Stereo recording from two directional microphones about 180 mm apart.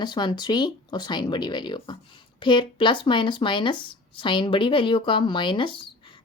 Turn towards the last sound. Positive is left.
turn(degrees=25)  # may be behind; listen again after turning